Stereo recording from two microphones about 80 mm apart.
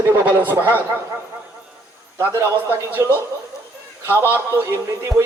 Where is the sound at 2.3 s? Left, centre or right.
Right.